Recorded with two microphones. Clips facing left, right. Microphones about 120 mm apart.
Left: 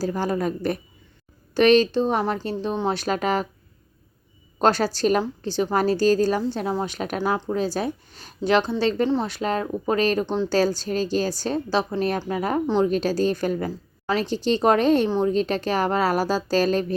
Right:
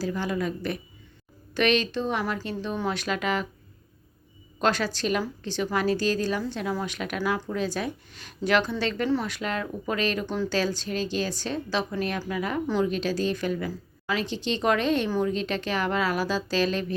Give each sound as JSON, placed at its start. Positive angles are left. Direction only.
{"t": 0.0, "sound": "speech", "side_deg": 40}
{"t": 4.6, "sound": "a woman's voice", "side_deg": 35}
{"t": 10.2, "sound": "speech", "side_deg": 25}
{"t": 10.5, "sound": "speech", "side_deg": 40}
{"t": 12.6, "sound": "speech", "side_deg": 25}
{"t": 12.9, "sound": "speech", "side_deg": 40}